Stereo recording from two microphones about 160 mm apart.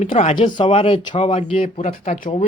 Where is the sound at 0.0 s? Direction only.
45° left (ahead or behind).